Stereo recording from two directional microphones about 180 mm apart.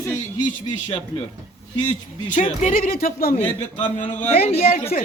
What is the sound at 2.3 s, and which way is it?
A man's voice, 45° left (ahead or behind).